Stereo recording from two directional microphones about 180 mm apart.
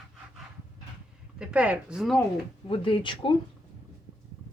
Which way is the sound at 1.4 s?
5° right (ahead or behind).